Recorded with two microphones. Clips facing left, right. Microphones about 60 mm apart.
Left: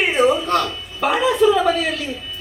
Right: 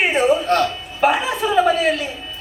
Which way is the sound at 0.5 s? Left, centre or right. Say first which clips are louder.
Right 1 dB; right.